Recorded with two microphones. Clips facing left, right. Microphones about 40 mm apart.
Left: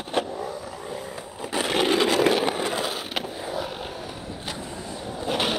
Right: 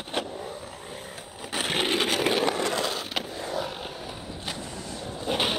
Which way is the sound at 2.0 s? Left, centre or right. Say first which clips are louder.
Left 5 dB; right.